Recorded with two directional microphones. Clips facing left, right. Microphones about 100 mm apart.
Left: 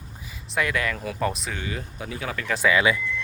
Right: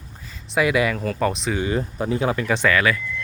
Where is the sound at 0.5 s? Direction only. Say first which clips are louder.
Right 6 dB; 10° right (ahead or behind).